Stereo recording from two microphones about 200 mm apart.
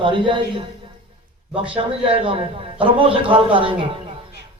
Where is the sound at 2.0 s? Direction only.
25° right (ahead or behind).